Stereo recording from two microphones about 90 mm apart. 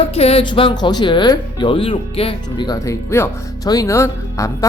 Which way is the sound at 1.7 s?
75° left (ahead or behind).